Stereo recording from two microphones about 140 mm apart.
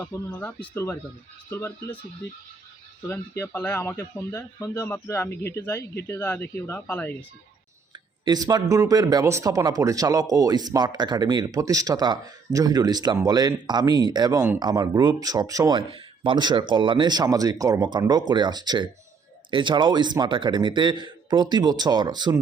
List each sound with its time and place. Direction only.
0.3 s speech: 10° left (ahead or behind)
3.1 s speech: 15° left (ahead or behind)
3.9 s a man's voice: 25° left (ahead or behind); by 7.3 s 10° left (ahead or behind)
8.2 s speech: 30° right (ahead or behind)
15.9 s speech: 35° right (ahead or behind)